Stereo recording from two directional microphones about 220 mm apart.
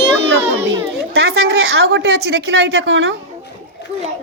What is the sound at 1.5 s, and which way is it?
A woman's voice, 50° right (ahead or behind).